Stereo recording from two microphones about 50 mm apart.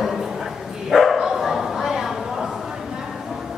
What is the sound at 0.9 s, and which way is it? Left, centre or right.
Bow-wow, centre.